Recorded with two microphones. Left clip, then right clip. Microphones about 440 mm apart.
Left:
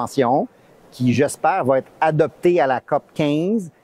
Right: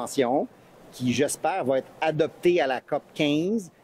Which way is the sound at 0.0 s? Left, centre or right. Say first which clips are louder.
Left 6 dB; left.